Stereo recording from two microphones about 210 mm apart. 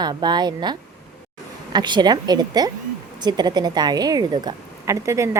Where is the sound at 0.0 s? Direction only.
20° right (ahead or behind).